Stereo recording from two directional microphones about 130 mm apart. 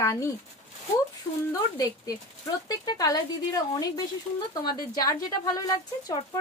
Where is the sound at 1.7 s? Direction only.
25° left (ahead or behind).